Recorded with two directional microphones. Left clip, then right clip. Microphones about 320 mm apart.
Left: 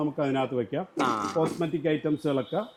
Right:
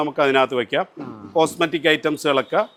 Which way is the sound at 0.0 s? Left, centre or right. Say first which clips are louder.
Right 10 dB; centre.